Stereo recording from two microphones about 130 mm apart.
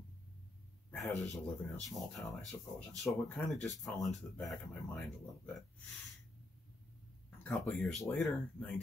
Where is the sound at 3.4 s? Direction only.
15° left (ahead or behind).